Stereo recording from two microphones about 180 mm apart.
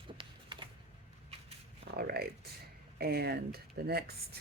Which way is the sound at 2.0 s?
60° right (ahead or behind).